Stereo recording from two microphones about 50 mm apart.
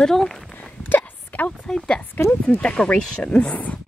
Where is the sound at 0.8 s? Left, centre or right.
Left.